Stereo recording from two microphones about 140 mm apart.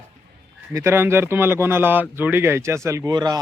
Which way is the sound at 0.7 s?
20° right (ahead or behind).